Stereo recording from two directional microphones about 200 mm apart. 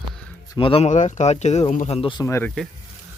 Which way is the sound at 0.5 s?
25° left (ahead or behind).